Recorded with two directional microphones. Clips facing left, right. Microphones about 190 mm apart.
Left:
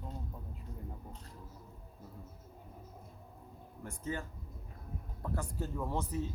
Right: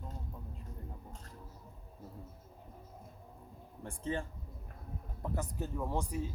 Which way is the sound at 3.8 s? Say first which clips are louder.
Right 2 dB; 30° right (ahead or behind).